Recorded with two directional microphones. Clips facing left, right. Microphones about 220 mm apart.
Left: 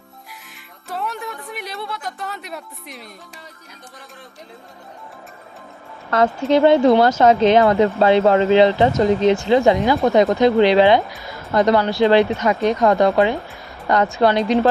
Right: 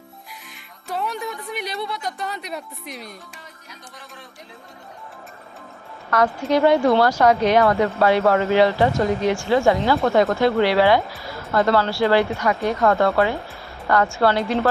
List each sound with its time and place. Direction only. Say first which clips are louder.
0.9 s music: right 1 dB; centre (ahead or behind)
6.1 s speech: left 3 dB; 25° left (ahead or behind)